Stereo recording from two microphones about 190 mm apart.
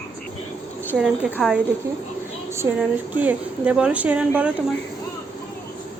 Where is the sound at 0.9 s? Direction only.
Centre (ahead or behind).